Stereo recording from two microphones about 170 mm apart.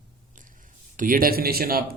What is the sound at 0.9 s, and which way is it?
Speech, 55° right (ahead or behind).